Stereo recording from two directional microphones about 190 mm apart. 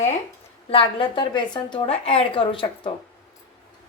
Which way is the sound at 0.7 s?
30° left (ahead or behind).